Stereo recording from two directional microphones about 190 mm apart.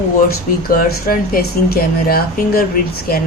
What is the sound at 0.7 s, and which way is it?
Speech, 50° left (ahead or behind).